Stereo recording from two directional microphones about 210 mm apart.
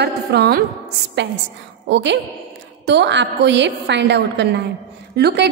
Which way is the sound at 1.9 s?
55° right (ahead or behind).